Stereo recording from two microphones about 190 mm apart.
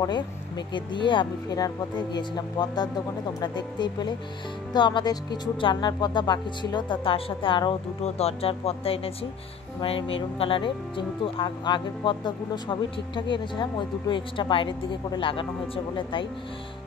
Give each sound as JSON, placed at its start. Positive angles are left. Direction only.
{"t": 0.7, "sound": "speech", "side_deg": 25}